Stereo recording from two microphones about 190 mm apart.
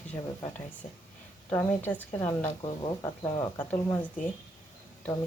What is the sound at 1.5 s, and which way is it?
Speech, 10° left (ahead or behind).